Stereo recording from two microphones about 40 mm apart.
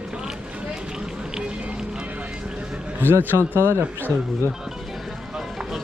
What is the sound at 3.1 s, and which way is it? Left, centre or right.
Speech, right.